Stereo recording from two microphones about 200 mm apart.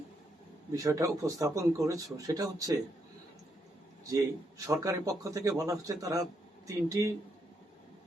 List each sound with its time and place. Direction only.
0.7 s a man's voice: 15° right (ahead or behind)
4.1 s a man's voice: 15° right (ahead or behind)